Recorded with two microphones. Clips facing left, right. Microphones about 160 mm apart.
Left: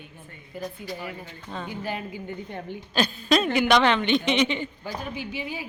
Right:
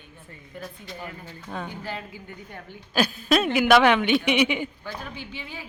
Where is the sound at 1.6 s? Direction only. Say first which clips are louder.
Left 3 dB; 15° left (ahead or behind).